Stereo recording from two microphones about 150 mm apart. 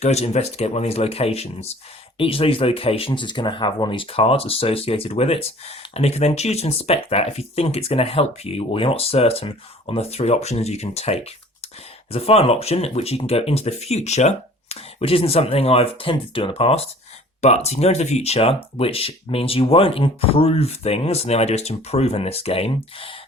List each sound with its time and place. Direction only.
0.0 s speech: 45° left (ahead or behind)